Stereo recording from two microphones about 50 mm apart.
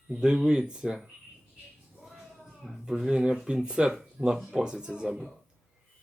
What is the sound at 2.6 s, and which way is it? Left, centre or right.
Speech, centre.